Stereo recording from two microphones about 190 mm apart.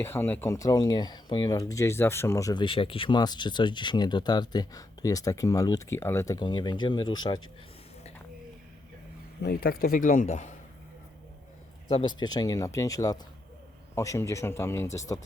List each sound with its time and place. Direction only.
0.0 s speech: 10° left (ahead or behind)
9.4 s a man's voice: 55° left (ahead or behind)
11.9 s speech: 25° left (ahead or behind)